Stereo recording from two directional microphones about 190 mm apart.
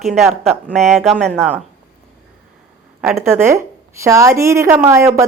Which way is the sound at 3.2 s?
15° right (ahead or behind).